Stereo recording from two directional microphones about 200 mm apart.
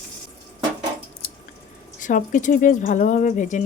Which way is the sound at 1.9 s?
40° left (ahead or behind).